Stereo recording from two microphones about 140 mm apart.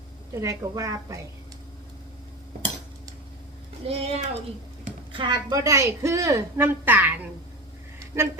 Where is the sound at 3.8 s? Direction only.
45° right (ahead or behind).